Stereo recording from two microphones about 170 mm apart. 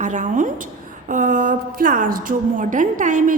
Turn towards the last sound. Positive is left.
turn(degrees=-50)  # may be behind; listen again after turning